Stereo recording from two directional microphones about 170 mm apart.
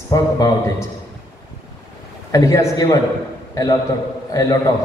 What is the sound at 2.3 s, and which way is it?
A man's voice, 20° left (ahead or behind).